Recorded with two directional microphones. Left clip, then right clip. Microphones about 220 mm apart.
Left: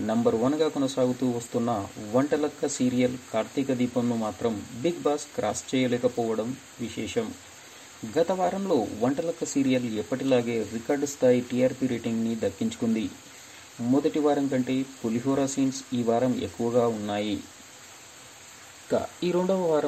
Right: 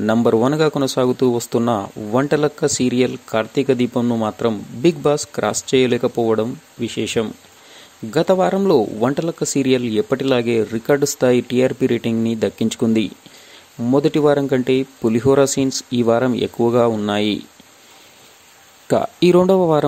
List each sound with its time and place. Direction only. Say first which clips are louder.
0.0 s speech: right 9 dB; 50° right (ahead or behind)
14.0 s speech: right 10 dB; 50° right (ahead or behind)
18.9 s speech: right 12 dB; 55° right (ahead or behind)